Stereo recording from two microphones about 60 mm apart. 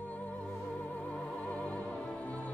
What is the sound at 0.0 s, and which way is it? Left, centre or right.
Music, left.